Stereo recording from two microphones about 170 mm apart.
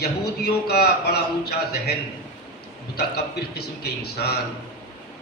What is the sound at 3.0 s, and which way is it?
A man's voice, 70° left (ahead or behind).